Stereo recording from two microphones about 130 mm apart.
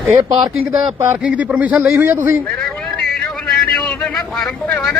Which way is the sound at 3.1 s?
5° left (ahead or behind).